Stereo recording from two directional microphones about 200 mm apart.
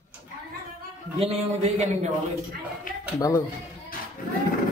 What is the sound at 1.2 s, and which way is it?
Speech, 35° right (ahead or behind).